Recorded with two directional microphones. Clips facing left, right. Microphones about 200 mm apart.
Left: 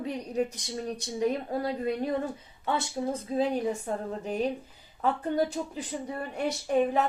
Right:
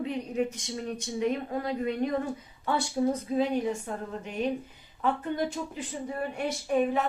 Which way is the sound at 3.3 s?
35° left (ahead or behind).